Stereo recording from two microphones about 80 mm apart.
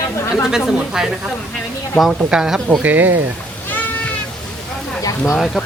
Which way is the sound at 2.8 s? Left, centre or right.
Right.